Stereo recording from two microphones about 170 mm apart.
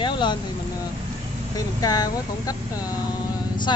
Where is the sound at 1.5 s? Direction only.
20° left (ahead or behind).